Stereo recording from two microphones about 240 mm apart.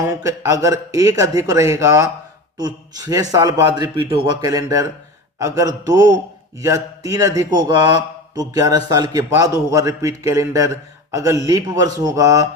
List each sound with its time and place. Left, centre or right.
0.1 s speech: centre